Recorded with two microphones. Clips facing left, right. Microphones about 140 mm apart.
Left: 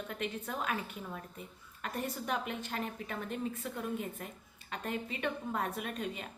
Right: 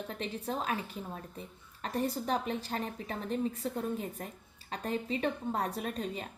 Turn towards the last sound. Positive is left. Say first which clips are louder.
# right 2 dB
turn(degrees=-35)  # may be behind; listen again after turning